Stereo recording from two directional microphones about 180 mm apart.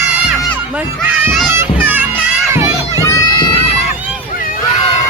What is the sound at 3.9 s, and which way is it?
Boat, 10° right (ahead or behind).